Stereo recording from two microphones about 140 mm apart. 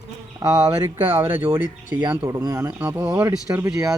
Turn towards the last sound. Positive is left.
turn(degrees=-10)  # may be behind; listen again after turning